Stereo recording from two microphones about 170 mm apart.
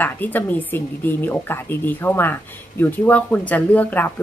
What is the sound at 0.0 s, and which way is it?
Speech, 10° left (ahead or behind).